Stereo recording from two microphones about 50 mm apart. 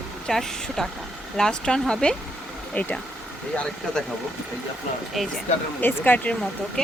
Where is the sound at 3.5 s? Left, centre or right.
Centre.